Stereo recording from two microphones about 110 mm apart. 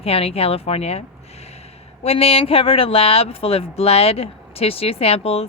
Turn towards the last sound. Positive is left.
turn(degrees=65)  # may be behind; listen again after turning